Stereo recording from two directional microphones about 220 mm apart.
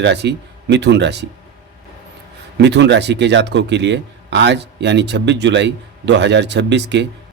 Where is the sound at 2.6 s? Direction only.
50° right (ahead or behind).